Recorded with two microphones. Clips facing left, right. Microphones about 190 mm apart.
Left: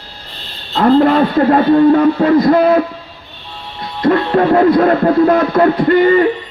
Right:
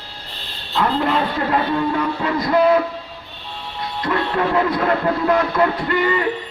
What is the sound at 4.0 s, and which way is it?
Music, 45° left (ahead or behind).